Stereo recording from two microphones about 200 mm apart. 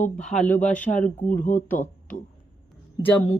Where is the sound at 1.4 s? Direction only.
40° left (ahead or behind).